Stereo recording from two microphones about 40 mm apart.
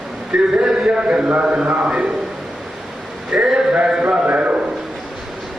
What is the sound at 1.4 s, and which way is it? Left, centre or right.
Speech, right.